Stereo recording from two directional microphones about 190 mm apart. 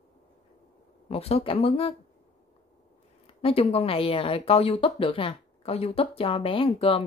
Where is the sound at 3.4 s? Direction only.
30° left (ahead or behind).